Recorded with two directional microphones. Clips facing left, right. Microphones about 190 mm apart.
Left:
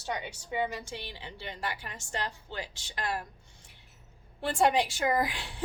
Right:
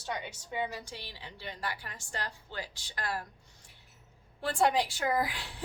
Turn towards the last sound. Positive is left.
turn(degrees=25)  # may be behind; listen again after turning